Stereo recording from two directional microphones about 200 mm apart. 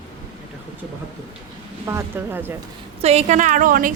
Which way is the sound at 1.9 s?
10° right (ahead or behind).